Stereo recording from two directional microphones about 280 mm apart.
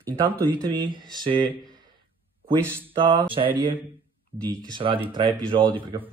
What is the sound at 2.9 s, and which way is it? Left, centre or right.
Speech, centre.